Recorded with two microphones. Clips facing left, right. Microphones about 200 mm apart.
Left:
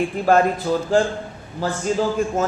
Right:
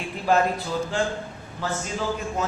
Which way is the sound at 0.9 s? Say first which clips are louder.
Left 8 dB; 45° left (ahead or behind).